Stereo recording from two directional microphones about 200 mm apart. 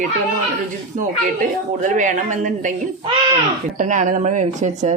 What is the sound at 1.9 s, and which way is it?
Speech, 40° right (ahead or behind).